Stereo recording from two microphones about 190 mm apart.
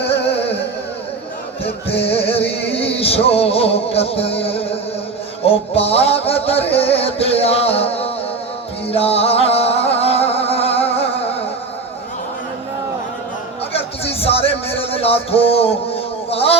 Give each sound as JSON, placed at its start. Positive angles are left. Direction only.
{"t": 0.3, "sound": "music", "side_deg": 30}
{"t": 1.6, "sound": "music", "side_deg": 30}
{"t": 13.7, "sound": "music", "side_deg": 30}